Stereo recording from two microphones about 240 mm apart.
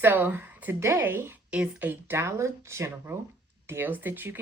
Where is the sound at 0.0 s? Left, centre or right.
Centre.